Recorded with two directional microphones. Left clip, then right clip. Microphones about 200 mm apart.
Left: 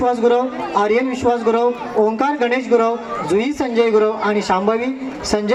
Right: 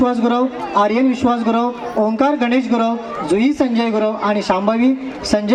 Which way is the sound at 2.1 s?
25° right (ahead or behind).